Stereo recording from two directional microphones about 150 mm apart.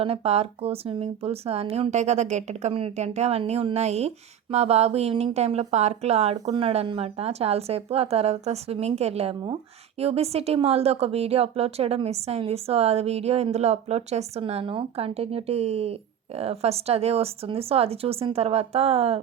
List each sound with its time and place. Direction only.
0.0 s speech: 40° right (ahead or behind)